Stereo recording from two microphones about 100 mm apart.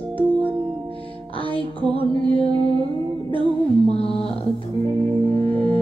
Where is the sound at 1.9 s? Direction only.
75° left (ahead or behind).